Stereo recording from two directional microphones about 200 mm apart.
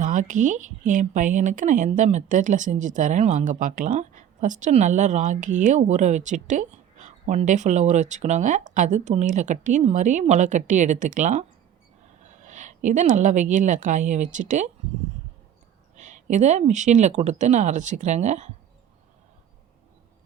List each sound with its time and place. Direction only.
0.0 s a woman's voice: 40° right (ahead or behind)
16.0 s speech: 35° right (ahead or behind)